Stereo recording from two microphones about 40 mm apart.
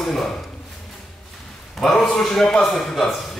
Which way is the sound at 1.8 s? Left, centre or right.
Centre.